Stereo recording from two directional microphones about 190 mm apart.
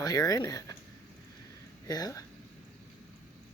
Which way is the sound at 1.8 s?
20° left (ahead or behind).